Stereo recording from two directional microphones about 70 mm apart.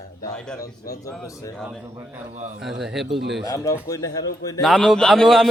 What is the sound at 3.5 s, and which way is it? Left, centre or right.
A man's voice, left.